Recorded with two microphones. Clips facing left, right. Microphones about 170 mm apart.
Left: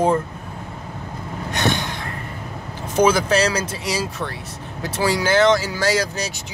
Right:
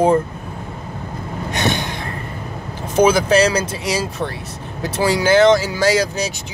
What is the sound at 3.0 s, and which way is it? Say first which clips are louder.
Speech: right 3 dB; 20° right (ahead or behind).